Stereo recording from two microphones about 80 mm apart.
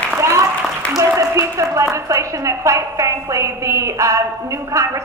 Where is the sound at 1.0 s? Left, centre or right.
Right.